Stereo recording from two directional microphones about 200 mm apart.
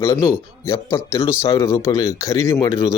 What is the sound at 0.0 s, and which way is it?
Speech, 15° left (ahead or behind).